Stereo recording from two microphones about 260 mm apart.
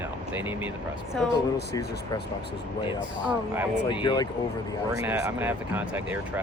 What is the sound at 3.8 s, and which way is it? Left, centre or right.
Speech, centre.